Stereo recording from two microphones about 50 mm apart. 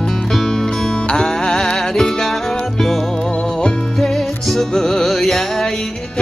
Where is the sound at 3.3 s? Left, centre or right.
Centre.